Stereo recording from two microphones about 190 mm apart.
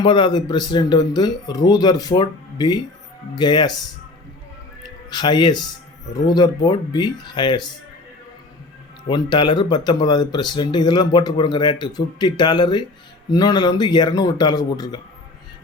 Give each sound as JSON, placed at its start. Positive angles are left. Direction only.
{"t": 0.0, "sound": "speech", "side_deg": 25}
{"t": 4.8, "sound": "speech", "side_deg": 25}
{"t": 9.0, "sound": "speech", "side_deg": 25}